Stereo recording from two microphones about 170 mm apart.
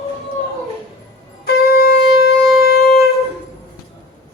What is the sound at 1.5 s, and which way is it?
Shofar, 60° left (ahead or behind).